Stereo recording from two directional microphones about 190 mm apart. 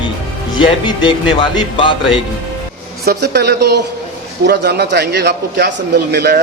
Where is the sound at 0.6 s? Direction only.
25° left (ahead or behind).